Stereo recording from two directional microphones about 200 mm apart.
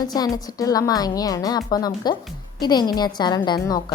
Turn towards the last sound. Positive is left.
turn(degrees=20)  # may be behind; listen again after turning